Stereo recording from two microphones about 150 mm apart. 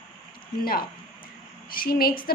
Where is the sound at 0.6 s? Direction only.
80° left.